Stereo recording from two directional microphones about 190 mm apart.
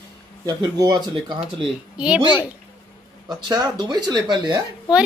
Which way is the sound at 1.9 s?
5° right (ahead or behind).